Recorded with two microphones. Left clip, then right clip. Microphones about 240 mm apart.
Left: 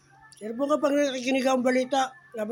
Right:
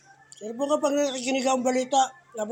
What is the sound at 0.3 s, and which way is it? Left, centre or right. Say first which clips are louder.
Speech: even; left.